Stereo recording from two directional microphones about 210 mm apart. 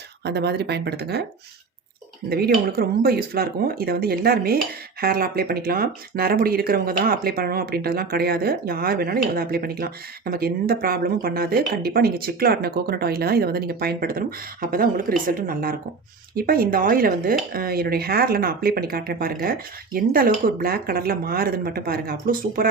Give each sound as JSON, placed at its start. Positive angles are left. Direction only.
{"t": 0.3, "sound": "speech", "side_deg": -50}
{"t": 2.3, "sound": "speech", "side_deg": -45}